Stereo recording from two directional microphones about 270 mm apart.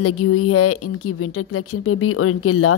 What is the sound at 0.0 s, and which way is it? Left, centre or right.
Speech, left.